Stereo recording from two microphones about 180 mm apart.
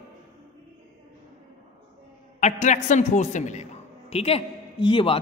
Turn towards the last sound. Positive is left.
turn(degrees=30)  # may be behind; listen again after turning